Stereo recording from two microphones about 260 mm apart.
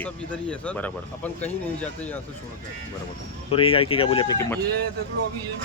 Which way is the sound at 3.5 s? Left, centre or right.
Left.